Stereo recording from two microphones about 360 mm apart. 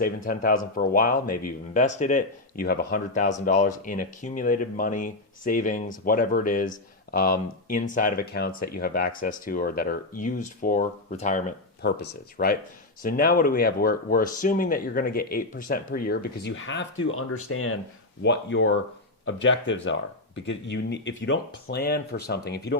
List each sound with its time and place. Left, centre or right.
0.0 s speech: left